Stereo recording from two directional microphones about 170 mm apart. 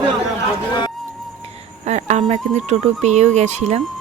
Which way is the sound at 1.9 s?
45° right (ahead or behind).